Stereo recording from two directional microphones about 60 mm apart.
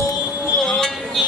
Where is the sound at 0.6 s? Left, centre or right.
Centre.